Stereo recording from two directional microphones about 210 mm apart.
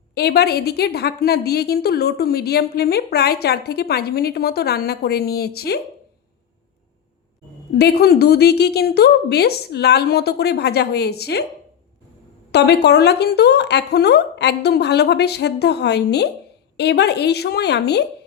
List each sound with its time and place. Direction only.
0.1 s a woman's voice: 50° left (ahead or behind)
7.8 s a woman's voice: 50° left (ahead or behind)
12.5 s a woman's voice: 50° left (ahead or behind)